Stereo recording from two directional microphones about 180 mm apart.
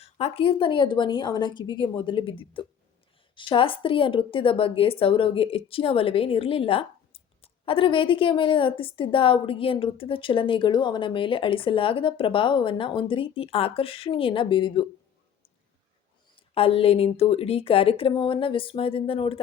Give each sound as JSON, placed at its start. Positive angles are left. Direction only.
{"t": 0.0, "sound": "a woman's voice", "side_deg": 35}
{"t": 16.6, "sound": "a woman's voice", "side_deg": 30}